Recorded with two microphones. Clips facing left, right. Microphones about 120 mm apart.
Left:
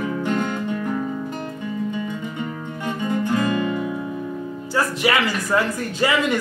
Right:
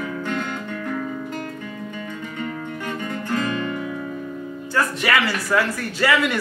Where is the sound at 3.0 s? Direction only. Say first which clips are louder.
Left 5 dB; 20° left (ahead or behind).